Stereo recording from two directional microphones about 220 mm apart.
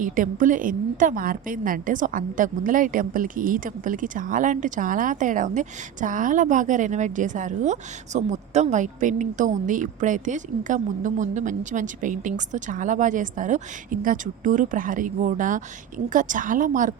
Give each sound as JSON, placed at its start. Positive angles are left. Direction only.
{"t": 0.0, "sound": "a woman's voice", "side_deg": -35}